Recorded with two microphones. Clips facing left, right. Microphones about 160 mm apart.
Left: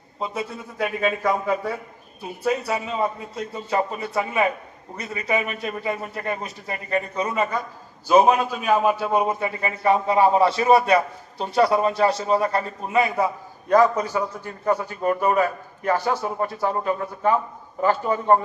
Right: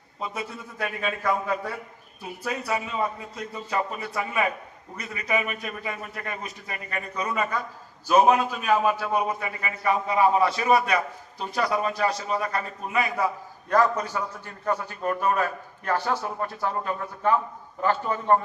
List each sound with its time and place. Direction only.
0.2 s a man's voice: 20° left (ahead or behind)
2.4 s a man's voice: 25° left (ahead or behind)
8.6 s a man's voice: 20° left (ahead or behind)